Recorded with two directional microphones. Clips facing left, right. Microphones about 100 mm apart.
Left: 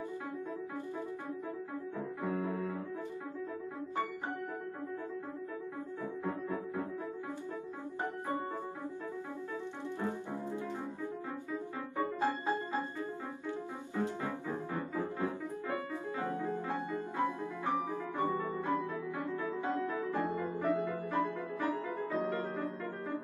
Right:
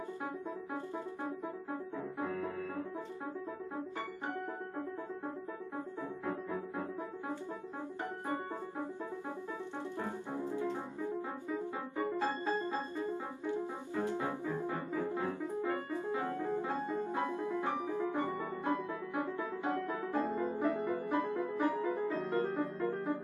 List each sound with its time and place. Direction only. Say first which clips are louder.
2.2 s piano: left 5 dB; 25° left (ahead or behind)
10.6 s music: right 2 dB; 20° right (ahead or behind)
12.4 s music: left 1 dB; 15° left (ahead or behind)
13.0 s music: right 2 dB; 20° right (ahead or behind)
15.0 s piano: right 1 dB; 20° right (ahead or behind)
18.4 s music: left 1 dB; 20° right (ahead or behind)